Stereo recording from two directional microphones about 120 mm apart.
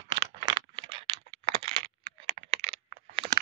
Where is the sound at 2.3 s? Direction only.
50° right (ahead or behind).